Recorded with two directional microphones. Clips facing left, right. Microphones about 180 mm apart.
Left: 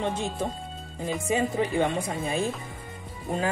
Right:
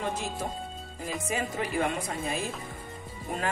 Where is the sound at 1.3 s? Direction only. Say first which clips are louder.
Left 6 dB; 30° left (ahead or behind).